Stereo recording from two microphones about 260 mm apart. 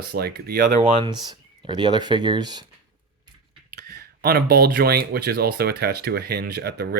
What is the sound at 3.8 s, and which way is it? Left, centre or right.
Speech, right.